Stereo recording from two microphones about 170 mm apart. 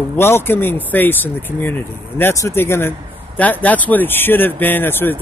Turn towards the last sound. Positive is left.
turn(degrees=10)  # may be behind; listen again after turning